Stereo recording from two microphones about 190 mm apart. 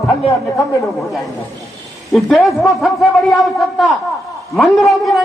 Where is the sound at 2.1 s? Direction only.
Centre (ahead or behind).